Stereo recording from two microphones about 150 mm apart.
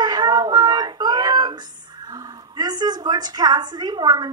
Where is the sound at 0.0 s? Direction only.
25° right (ahead or behind).